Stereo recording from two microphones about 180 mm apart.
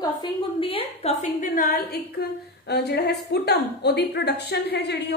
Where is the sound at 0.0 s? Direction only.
25° left (ahead or behind).